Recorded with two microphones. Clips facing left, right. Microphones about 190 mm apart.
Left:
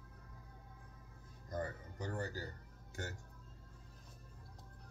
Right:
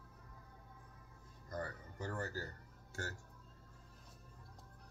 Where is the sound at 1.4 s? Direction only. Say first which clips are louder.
Left 2 dB; 20° left (ahead or behind).